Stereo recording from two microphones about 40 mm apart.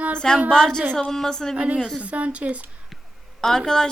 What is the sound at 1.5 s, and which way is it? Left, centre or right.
A woman's voice, right.